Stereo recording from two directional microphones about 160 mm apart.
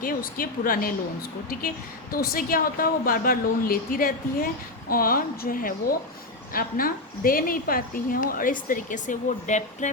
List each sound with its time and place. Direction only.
0.0 s a woman's voice: 65° left (ahead or behind)
2.1 s a woman's voice: 65° left (ahead or behind); by 9.9 s 50° left (ahead or behind)